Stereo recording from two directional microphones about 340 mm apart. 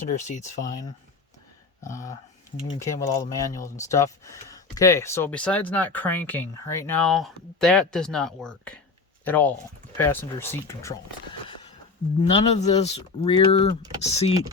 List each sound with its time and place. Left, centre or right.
0.0 s speech: left
1.8 s speech: centre
12.2 s speech: centre